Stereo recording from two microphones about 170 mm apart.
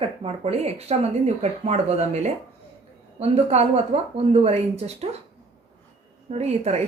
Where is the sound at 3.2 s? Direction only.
40° right (ahead or behind).